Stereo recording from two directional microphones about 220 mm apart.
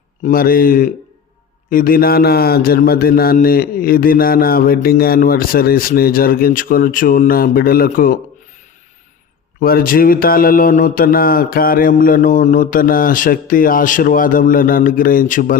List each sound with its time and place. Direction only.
0.3 s speech: 40° left (ahead or behind)
9.6 s speech: 40° left (ahead or behind)